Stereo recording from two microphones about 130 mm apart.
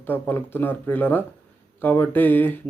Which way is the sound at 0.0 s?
15° left (ahead or behind).